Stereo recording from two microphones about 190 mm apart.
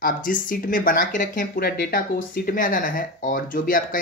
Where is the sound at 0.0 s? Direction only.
45° left (ahead or behind).